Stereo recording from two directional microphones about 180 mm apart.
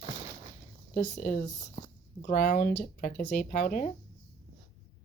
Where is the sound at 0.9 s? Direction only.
50° left (ahead or behind).